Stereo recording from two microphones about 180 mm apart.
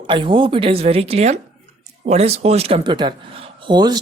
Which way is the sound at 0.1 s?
25° right (ahead or behind).